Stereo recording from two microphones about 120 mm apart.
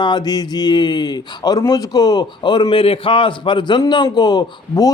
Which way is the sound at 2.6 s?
50° left (ahead or behind).